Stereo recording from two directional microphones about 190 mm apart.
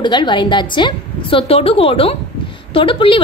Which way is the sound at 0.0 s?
25° left (ahead or behind).